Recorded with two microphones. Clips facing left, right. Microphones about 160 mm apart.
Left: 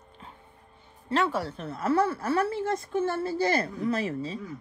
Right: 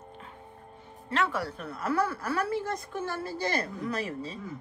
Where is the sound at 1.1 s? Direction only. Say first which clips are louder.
Left 3 dB; 30° left (ahead or behind).